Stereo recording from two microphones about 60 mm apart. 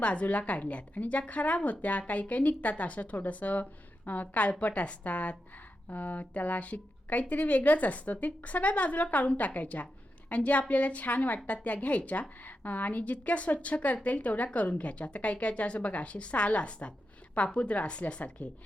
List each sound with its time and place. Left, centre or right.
0.0 s a woman's voice: left